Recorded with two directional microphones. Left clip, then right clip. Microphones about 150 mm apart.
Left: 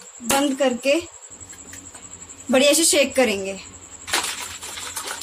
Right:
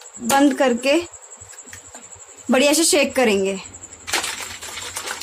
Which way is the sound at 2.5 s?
60° right (ahead or behind).